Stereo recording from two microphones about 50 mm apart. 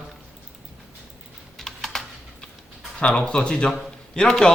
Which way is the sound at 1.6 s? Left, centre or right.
Centre.